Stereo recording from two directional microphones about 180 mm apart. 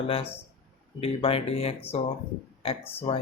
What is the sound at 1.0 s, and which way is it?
Speech, 30° left (ahead or behind).